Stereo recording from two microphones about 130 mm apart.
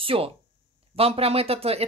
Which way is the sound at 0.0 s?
45° right (ahead or behind).